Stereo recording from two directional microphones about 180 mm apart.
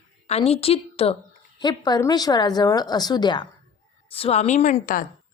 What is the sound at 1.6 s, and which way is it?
A woman's voice, 25° left (ahead or behind).